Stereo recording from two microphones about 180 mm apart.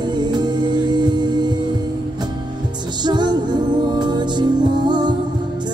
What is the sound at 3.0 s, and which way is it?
Music, 25° right (ahead or behind).